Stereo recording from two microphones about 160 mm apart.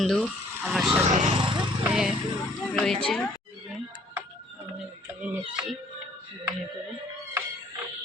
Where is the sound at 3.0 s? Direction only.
5° left (ahead or behind).